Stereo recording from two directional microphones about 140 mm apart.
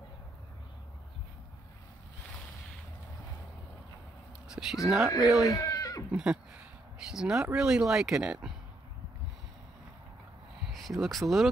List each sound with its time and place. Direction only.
4.5 s a sound: 5° right (ahead or behind)
4.8 s speech: 5° right (ahead or behind)
5.4 s goat: 25° left (ahead or behind)
6.1 s speech: 5° right (ahead or behind)
10.7 s speech: centre (ahead or behind)